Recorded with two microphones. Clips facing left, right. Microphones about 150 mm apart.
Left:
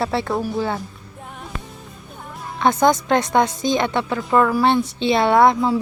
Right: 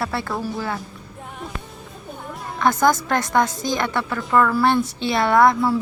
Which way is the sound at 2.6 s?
20° left (ahead or behind).